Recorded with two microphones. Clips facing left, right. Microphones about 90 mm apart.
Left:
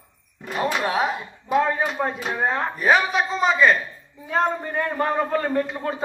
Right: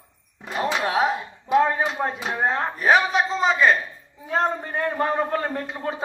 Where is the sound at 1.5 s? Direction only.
15° right (ahead or behind).